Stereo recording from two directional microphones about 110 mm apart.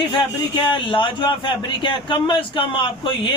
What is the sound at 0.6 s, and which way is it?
Speech, 50° left (ahead or behind).